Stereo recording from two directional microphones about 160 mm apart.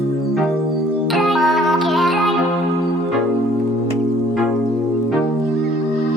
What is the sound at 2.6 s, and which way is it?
Music, 20° right (ahead or behind).